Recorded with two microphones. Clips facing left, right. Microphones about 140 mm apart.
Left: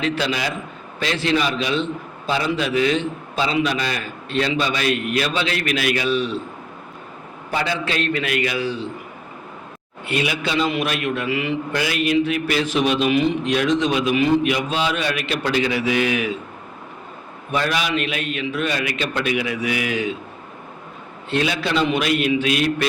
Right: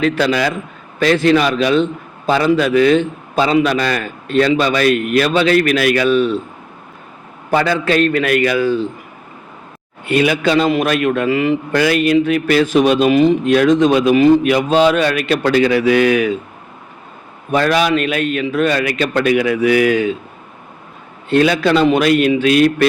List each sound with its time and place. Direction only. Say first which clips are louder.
0.0 s a man's voice: right 7 dB; 50° right (ahead or behind)
7.5 s a man's voice: right 9 dB; 55° right (ahead or behind)
10.1 s a man's voice: right 9 dB; 50° right (ahead or behind)
11.7 s a man's voice: right 7 dB; 55° right (ahead or behind)
17.5 s a man's voice: right 8 dB; 50° right (ahead or behind)
21.2 s a man's voice: right 9 dB; 50° right (ahead or behind)